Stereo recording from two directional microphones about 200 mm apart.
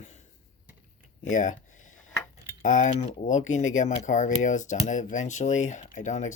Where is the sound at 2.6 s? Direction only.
40° left (ahead or behind).